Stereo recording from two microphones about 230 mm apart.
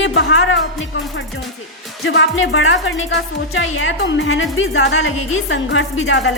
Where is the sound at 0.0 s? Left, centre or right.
Left.